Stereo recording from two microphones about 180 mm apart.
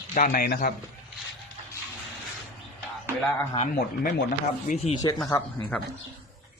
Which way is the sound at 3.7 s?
55° left (ahead or behind).